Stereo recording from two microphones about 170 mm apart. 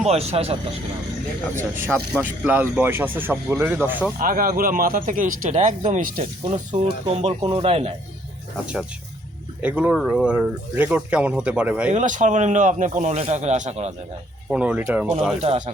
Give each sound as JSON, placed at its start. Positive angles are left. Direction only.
{"t": 0.0, "sound": "speech", "side_deg": -40}
{"t": 2.1, "sound": "speech", "side_deg": -10}
{"t": 4.2, "sound": "speech", "side_deg": -55}
{"t": 6.8, "sound": "speech", "side_deg": -35}
{"t": 8.6, "sound": "speech", "side_deg": -5}
{"t": 11.9, "sound": "speech", "side_deg": -45}
{"t": 14.5, "sound": "speech", "side_deg": -5}
{"t": 15.4, "sound": "speech", "side_deg": -40}